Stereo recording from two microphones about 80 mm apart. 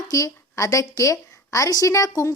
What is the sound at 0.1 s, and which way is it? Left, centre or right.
A woman's voice, left.